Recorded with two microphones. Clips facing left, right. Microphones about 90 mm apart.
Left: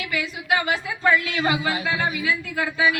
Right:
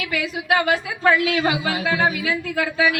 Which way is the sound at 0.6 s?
90° right.